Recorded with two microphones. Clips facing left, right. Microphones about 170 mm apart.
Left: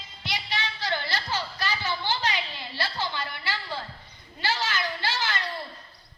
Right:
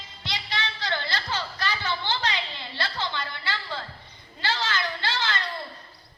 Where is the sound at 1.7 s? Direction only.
10° left (ahead or behind).